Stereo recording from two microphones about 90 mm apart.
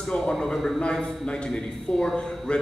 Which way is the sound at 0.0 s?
5° left (ahead or behind).